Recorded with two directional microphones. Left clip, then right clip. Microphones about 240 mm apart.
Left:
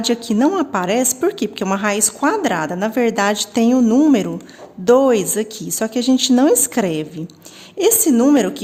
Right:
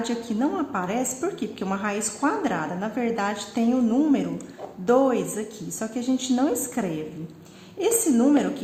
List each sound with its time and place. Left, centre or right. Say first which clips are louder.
0.1 s a woman's voice: left 14 dB; left